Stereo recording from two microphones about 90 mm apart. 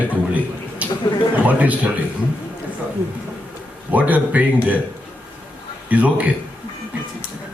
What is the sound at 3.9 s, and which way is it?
Speech, 15° right (ahead or behind).